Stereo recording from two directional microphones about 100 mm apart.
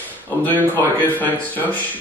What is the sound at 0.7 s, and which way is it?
A man's voice, 15° left (ahead or behind).